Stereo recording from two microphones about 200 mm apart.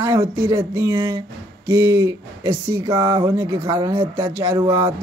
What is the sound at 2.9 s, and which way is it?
Speech, 25° right (ahead or behind).